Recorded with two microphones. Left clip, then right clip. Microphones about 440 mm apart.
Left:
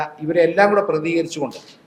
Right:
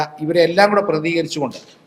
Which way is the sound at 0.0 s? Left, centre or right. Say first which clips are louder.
Right 1 dB; right.